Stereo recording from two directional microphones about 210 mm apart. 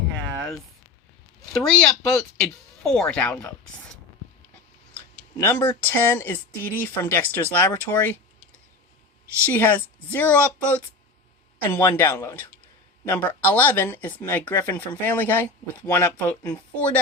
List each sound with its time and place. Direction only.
1.5 s speech: centre (ahead or behind)
5.4 s speech: 10° left (ahead or behind)
9.5 s speech: 10° left (ahead or behind)